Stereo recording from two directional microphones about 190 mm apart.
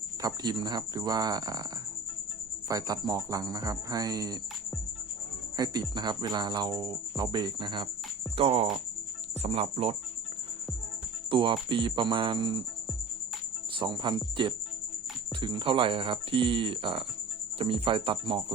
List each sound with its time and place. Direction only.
0.2 s speech: 20° right (ahead or behind)
2.6 s speech: 20° right (ahead or behind)
5.5 s speech: 20° right (ahead or behind)
11.3 s speech: 25° right (ahead or behind)
13.7 s speech: 25° right (ahead or behind)